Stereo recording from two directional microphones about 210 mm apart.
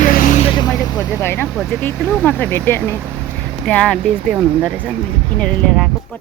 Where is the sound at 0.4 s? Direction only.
20° left (ahead or behind).